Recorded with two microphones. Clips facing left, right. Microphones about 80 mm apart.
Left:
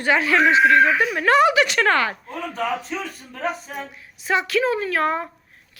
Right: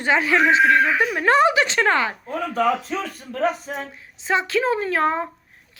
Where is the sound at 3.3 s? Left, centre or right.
Right.